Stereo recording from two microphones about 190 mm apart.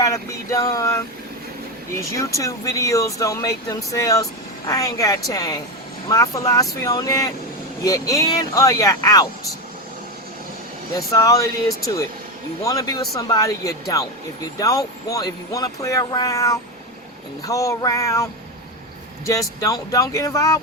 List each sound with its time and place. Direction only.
0.0 s speech: 15° left (ahead or behind)
10.9 s speech: 20° left (ahead or behind)
12.6 s speech: 20° left (ahead or behind)